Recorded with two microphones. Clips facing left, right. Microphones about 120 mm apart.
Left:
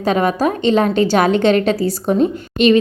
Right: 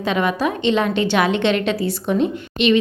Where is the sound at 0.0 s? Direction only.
40° left (ahead or behind).